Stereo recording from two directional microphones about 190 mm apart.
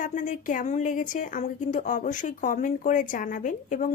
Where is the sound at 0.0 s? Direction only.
40° left (ahead or behind).